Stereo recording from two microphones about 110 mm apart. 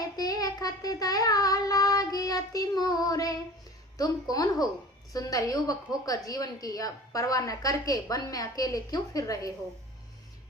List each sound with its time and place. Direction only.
0.2 s child singing: 35° left (ahead or behind)
3.9 s a woman's voice: 35° left (ahead or behind)